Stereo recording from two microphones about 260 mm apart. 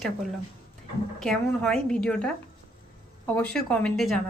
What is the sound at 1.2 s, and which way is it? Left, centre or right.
A woman's voice, centre.